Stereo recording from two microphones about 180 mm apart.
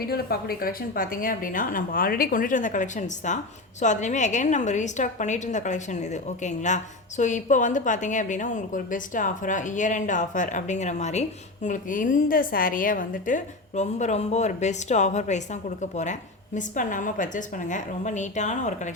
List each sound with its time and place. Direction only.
0.0 s a woman's voice: 60° left (ahead or behind); by 18.9 s 40° left (ahead or behind)